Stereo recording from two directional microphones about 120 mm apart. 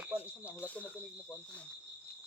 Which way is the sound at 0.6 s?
10° left (ahead or behind).